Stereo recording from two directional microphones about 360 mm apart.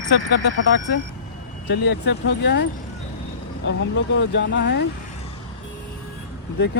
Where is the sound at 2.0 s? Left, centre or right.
Left.